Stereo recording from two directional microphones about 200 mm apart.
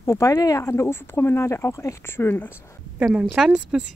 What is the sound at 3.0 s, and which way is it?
Speech, 5° right (ahead or behind).